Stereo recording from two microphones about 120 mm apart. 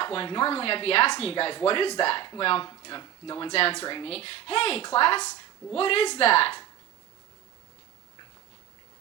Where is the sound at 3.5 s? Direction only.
55° left (ahead or behind).